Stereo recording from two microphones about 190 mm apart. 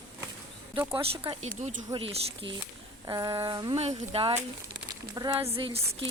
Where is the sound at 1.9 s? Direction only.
30° right (ahead or behind).